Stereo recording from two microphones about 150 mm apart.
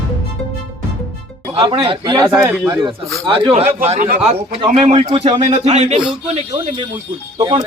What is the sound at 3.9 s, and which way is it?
Speech, 60° right (ahead or behind).